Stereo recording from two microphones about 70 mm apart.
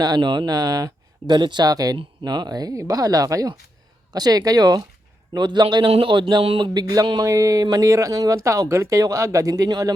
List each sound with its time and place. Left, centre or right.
0.0 s speech: right
2.7 s speech: right
5.3 s a man's voice: right
9.6 s speech: right